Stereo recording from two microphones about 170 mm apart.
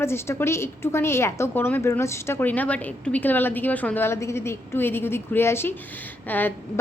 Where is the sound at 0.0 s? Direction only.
15° left (ahead or behind).